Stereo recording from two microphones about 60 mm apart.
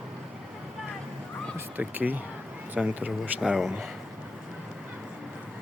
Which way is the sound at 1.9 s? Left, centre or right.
Right.